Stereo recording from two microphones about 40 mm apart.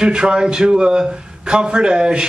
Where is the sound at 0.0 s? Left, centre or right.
Right.